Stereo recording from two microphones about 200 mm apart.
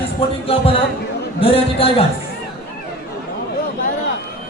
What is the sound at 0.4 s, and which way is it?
A man's voice, 30° left (ahead or behind).